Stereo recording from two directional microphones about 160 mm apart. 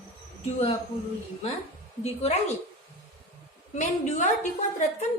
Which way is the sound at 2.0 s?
40° left (ahead or behind).